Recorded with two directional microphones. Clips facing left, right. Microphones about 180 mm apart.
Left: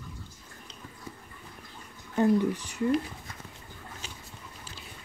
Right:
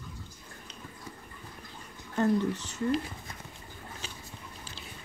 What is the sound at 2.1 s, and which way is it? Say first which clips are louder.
Speech: left 3 dB; 15° left (ahead or behind).